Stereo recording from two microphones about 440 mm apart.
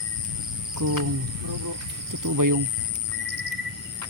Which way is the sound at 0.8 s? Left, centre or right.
Right.